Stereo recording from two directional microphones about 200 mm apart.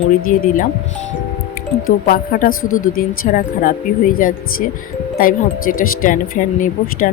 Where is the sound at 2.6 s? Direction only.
90° left.